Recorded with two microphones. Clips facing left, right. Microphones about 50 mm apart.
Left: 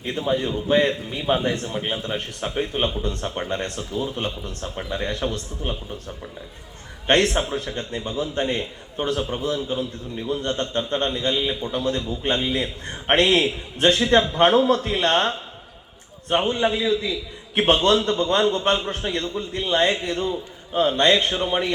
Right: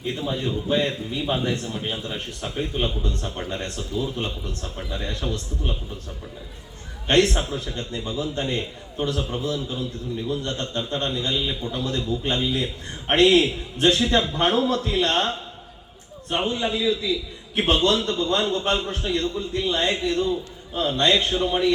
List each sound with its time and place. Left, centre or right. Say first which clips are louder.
0.0 s a man's voice: left 3 dB; left
7.1 s a man's voice: left 1 dB; left
16.5 s a man's voice: even; left